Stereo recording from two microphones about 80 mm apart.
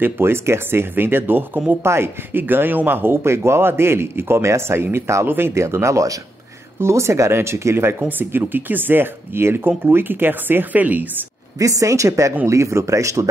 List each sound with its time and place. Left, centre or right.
0.0 s speech: right
11.5 s a woman's voice: right